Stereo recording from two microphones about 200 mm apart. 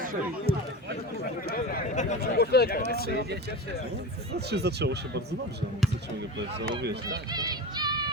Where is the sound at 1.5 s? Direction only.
40° left (ahead or behind).